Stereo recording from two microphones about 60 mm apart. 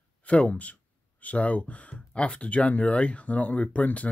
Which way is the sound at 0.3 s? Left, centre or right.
Left.